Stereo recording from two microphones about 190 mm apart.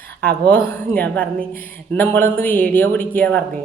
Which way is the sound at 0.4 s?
10° left (ahead or behind).